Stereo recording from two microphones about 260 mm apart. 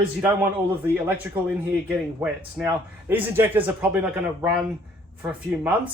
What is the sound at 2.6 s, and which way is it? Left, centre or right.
Speech, centre.